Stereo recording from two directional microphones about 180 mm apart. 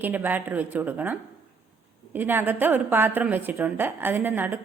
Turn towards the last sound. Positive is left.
turn(degrees=-10)  # may be behind; listen again after turning